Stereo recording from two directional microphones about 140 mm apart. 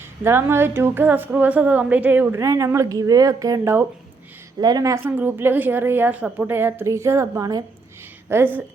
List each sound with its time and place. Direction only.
0.3 s a woman's voice: 15° right (ahead or behind)